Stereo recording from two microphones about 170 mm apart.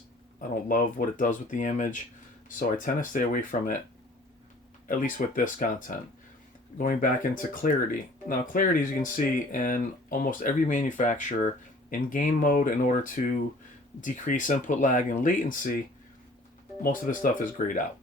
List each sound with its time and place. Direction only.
0.7 s speech: 55° left (ahead or behind)
4.9 s speech: 50° left (ahead or behind)
16.8 s speech: 55° left (ahead or behind)